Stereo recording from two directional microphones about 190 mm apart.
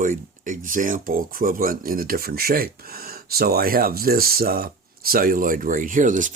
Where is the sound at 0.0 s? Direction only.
45° right (ahead or behind).